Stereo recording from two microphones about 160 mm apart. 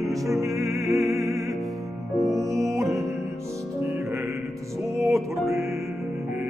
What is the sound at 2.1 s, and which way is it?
Music, 20° right (ahead or behind).